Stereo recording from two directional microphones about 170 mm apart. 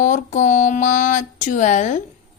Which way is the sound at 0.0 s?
50° left (ahead or behind).